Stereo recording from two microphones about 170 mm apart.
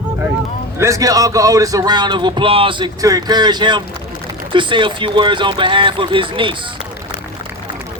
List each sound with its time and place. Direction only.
0.8 s speech: 20° right (ahead or behind)